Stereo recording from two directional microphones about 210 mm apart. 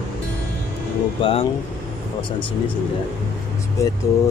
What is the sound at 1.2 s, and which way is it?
Speech, 25° left (ahead or behind).